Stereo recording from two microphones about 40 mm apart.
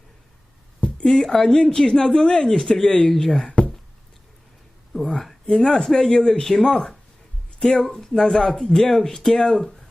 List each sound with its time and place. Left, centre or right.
1.0 s speech: centre
3.4 s a sound: left
5.0 s speech: centre
7.9 s speech: centre